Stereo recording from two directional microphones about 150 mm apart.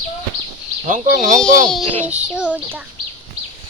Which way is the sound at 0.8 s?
55° right (ahead or behind).